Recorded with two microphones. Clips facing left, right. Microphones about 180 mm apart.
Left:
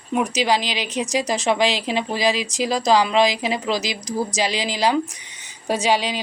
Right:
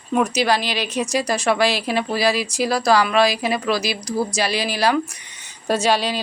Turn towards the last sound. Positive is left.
turn(degrees=15)  # may be behind; listen again after turning